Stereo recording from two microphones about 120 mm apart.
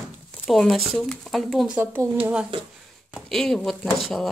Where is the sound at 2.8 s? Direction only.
Centre (ahead or behind).